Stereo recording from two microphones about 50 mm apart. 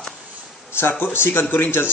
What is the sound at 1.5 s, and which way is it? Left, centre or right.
Speech, left.